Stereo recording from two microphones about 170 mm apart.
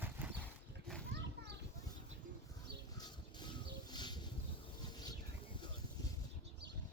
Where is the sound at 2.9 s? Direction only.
25° left (ahead or behind).